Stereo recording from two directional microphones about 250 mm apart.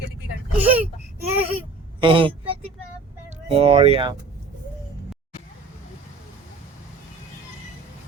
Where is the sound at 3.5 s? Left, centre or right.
Right.